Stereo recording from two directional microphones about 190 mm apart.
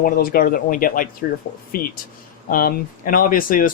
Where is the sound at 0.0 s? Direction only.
50° left (ahead or behind).